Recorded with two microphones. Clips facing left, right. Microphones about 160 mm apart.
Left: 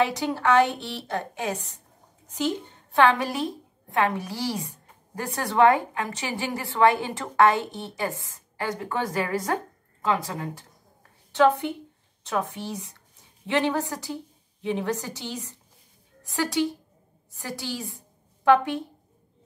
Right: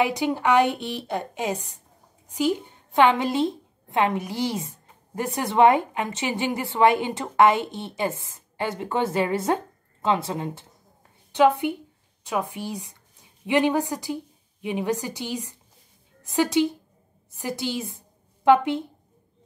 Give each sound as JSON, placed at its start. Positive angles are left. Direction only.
{"t": 0.0, "sound": "a woman's voice", "side_deg": -15}
{"t": 2.9, "sound": "a woman's voice", "side_deg": -20}